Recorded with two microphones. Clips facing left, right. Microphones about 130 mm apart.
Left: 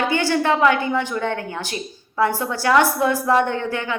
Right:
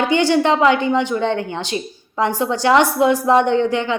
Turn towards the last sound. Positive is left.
turn(degrees=-20)  # may be behind; listen again after turning